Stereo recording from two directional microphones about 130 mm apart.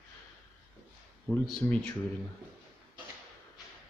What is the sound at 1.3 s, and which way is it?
Speech, 10° left (ahead or behind).